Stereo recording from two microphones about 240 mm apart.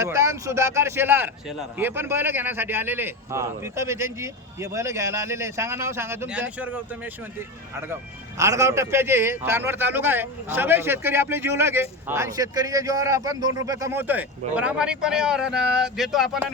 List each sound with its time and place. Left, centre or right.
0.0 s speech: centre